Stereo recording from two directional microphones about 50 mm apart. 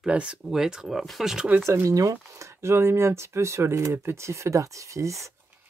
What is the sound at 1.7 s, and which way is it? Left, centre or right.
Speech, right.